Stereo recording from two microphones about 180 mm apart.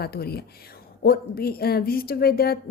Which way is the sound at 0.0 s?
60° left (ahead or behind).